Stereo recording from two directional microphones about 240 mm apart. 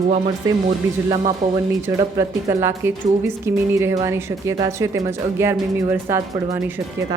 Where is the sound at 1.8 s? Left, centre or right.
Centre.